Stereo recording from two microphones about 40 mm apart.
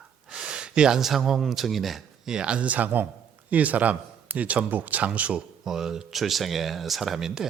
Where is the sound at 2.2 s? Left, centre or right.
Centre; by 5.4 s right.